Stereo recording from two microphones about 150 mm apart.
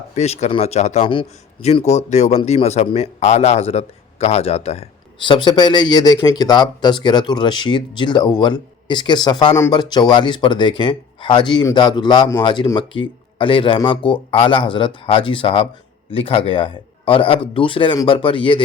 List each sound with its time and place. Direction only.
0.1 s speech: 45° left (ahead or behind)
1.1 s a man's voice: 35° left (ahead or behind)